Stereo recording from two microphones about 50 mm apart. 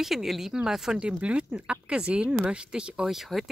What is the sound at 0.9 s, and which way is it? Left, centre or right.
Speech, right.